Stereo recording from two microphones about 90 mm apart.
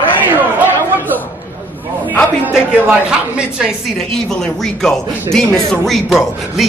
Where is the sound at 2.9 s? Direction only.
10° right (ahead or behind).